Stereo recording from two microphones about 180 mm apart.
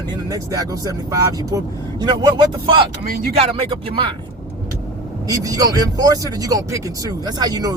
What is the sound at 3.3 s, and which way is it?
Speech, 35° right (ahead or behind).